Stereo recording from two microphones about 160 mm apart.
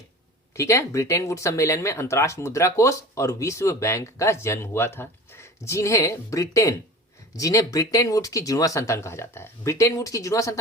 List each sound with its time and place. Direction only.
0.5 s speech: 15° left (ahead or behind)